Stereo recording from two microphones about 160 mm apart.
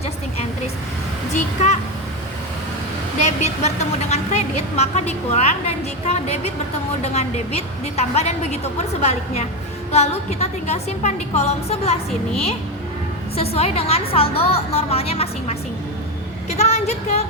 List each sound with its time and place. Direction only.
1.3 s a woman's voice: 45° left (ahead or behind)
3.2 s a woman's voice: 45° left (ahead or behind)
13.3 s a woman's voice: 40° left (ahead or behind)